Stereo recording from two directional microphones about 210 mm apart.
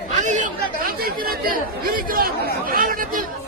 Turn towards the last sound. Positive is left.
turn(degrees=-40)  # may be behind; listen again after turning